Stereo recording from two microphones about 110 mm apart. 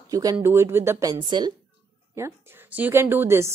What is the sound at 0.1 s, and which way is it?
Speech, 35° right (ahead or behind).